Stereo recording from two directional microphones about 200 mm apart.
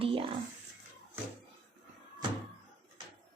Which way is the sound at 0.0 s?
30° right (ahead or behind).